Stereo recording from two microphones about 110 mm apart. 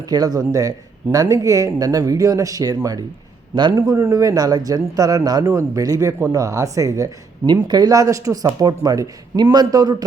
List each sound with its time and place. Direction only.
0.1 s speech: 35° right (ahead or behind)
7.4 s speech: 40° right (ahead or behind)